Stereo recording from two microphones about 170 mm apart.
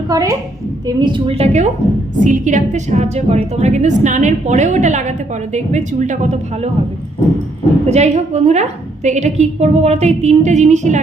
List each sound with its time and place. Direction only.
0.1 s a woman's voice: 20° right (ahead or behind); by 1.6 s 35° right (ahead or behind)
2.2 s a woman's voice: 50° right (ahead or behind)
7.9 s a woman's voice: 40° right (ahead or behind)